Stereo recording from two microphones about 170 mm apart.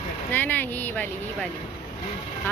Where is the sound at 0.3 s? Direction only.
10° left (ahead or behind).